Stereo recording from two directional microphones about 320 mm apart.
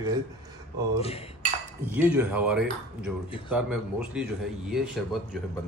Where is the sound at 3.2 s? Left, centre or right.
Centre.